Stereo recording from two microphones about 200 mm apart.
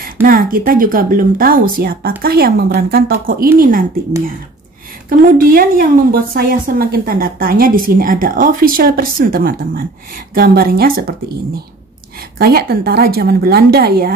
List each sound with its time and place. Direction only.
0.0 s a woman's voice: 45° right (ahead or behind)
5.5 s a woman's voice: 45° right (ahead or behind)
12.4 s a woman's voice: 50° right (ahead or behind)